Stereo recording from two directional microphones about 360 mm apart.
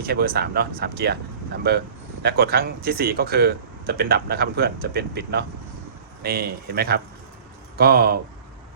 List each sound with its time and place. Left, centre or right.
0.0 s speech: right